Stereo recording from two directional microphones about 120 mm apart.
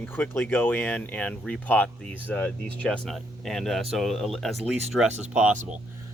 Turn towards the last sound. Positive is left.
turn(degrees=-10)  # may be behind; listen again after turning